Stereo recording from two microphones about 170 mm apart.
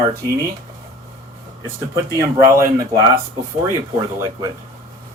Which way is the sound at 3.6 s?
20° right (ahead or behind).